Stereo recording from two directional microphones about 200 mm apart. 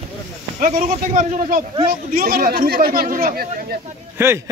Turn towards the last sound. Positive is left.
turn(degrees=-10)  # may be behind; listen again after turning